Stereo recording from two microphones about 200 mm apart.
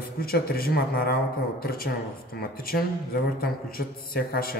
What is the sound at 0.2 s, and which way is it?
Speech, 50° left (ahead or behind).